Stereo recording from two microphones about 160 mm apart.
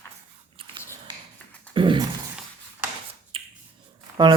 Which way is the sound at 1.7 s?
30° right (ahead or behind).